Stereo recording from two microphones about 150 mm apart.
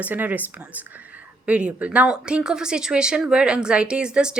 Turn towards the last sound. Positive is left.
turn(degrees=-5)  # may be behind; listen again after turning